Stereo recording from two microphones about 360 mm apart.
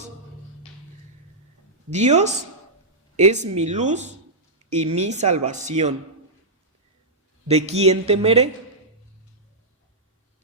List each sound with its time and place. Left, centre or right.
1.9 s speech: centre
7.4 s speech: centre